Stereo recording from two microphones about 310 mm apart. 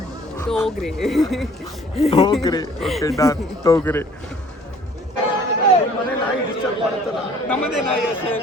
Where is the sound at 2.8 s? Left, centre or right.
Centre.